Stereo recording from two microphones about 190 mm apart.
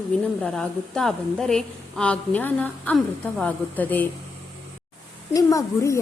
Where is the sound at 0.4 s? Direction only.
5° left (ahead or behind).